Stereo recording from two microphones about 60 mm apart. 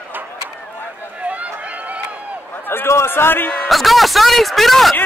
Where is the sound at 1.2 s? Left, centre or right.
Right.